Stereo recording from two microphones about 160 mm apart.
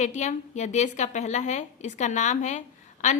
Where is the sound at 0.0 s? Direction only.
50° left (ahead or behind).